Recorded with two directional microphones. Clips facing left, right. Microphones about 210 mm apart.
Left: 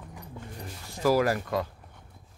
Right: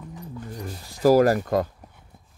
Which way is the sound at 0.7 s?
35° right (ahead or behind).